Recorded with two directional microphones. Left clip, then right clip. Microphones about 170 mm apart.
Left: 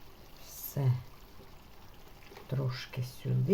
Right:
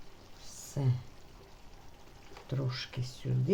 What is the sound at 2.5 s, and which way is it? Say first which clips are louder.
Speech: even; 20° right (ahead or behind).